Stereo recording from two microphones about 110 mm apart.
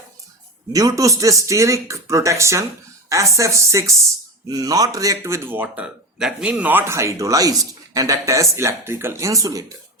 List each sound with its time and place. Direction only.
0.7 s speech: 35° right (ahead or behind)